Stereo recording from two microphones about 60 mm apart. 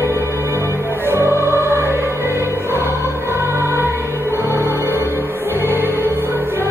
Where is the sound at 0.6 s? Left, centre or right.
Right.